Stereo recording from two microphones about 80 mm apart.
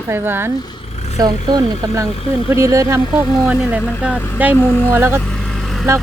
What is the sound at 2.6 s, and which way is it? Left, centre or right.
Speech, right.